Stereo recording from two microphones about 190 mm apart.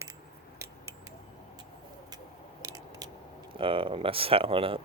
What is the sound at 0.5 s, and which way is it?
Scissors, 15° right (ahead or behind).